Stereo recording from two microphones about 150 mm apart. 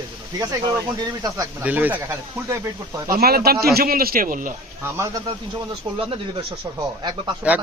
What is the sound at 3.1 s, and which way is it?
A man's voice, 90° right.